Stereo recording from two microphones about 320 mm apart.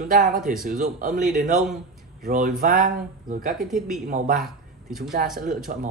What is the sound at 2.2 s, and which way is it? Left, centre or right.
Speech, right.